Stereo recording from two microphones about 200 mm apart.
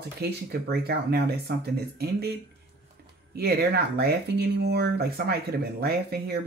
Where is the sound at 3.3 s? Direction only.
50° right (ahead or behind).